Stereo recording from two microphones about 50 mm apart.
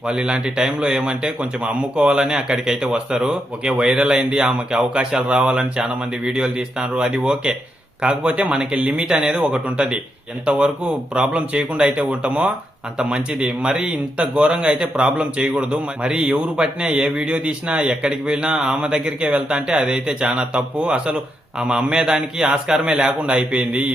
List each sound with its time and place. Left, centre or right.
0.0 s speech: centre